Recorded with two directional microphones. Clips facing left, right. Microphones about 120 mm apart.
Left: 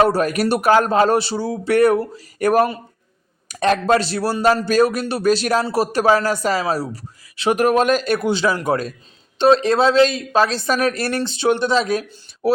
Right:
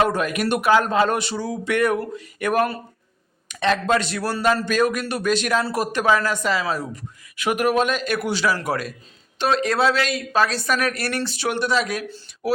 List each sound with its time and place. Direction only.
0.0 s speech: 35° left (ahead or behind)
8.2 s speech: 20° left (ahead or behind)